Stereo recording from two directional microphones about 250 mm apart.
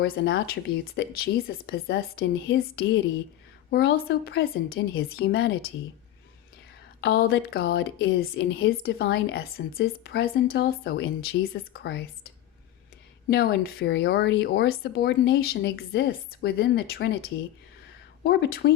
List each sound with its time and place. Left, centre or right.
0.0 s a woman's voice: left
7.0 s a woman's voice: left
13.3 s a woman's voice: left
18.2 s a woman's voice: left